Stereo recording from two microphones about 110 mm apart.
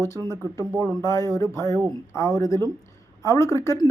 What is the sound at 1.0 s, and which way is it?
Speech, 25° left (ahead or behind).